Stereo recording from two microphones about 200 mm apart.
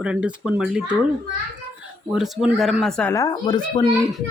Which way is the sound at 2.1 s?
Centre (ahead or behind).